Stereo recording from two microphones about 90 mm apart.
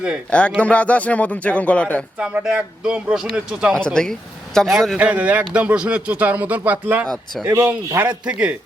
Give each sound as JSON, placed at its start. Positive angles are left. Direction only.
{"t": 0.3, "sound": "a man's voice", "side_deg": 10}
{"t": 2.1, "sound": "speech", "side_deg": -10}
{"t": 3.8, "sound": "a man's voice", "side_deg": 10}
{"t": 4.9, "sound": "speech", "side_deg": -15}